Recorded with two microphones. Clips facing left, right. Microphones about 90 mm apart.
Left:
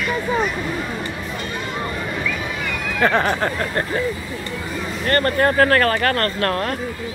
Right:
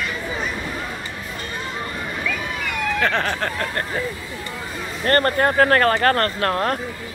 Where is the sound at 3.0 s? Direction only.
10° left (ahead or behind).